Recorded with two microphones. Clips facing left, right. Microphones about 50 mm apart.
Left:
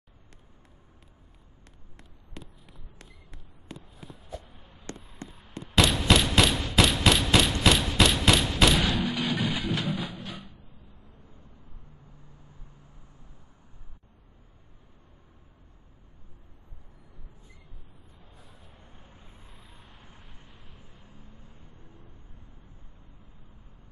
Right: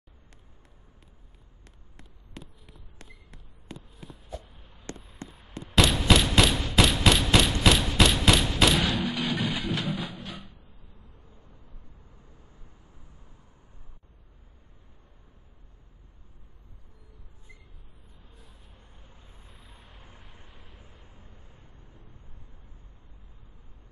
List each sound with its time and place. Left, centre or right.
1.6 s a sound: centre
11.1 s vehicle: left
18.4 s vehicle: centre
18.9 s vehicle: left
19.2 s vehicle: centre